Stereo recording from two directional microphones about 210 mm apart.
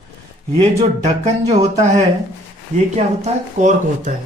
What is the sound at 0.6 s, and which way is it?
Speech, 30° right (ahead or behind).